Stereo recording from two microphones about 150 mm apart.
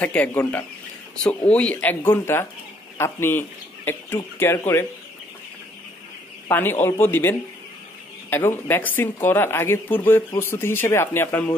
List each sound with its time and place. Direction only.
0.0 s speech: 10° left (ahead or behind)
6.5 s speech: 15° left (ahead or behind)